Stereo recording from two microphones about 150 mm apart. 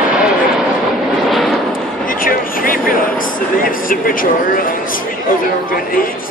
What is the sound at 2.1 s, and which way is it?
Vehicle, 70° left (ahead or behind).